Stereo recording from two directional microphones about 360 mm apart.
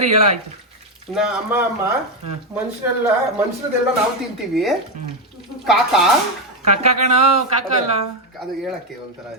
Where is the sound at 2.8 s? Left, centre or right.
Centre.